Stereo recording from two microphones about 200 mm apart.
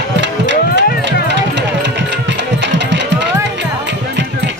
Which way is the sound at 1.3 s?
60° right (ahead or behind).